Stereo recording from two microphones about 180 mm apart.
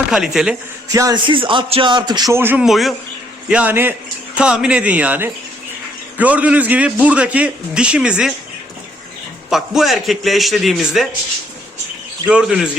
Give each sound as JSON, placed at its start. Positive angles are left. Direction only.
{"t": 0.1, "sound": "a man's voice", "side_deg": -5}
{"t": 0.9, "sound": "a man's voice", "side_deg": -20}
{"t": 9.5, "sound": "a man's voice", "side_deg": 0}
{"t": 12.2, "sound": "a man's voice", "side_deg": -5}